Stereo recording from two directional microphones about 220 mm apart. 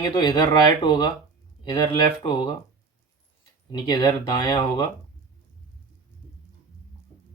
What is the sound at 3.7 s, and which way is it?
Speech, 20° left (ahead or behind).